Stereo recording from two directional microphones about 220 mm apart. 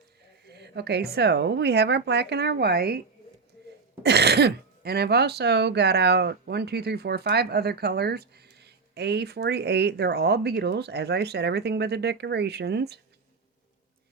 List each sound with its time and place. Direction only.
0.4 s speech: 50° right (ahead or behind)
4.0 s speech: 50° right (ahead or behind)